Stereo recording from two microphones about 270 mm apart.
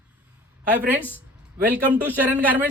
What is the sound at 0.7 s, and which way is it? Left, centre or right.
A man's voice, centre.